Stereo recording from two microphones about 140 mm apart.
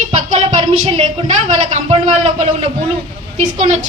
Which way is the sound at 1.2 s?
55° right (ahead or behind).